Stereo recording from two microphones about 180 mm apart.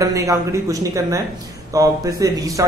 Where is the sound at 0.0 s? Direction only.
20° right (ahead or behind).